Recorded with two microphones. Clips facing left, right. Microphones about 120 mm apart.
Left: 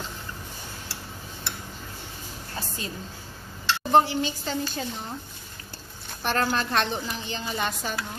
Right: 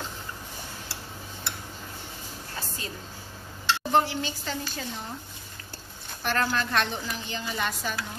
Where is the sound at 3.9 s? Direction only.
20° left (ahead or behind).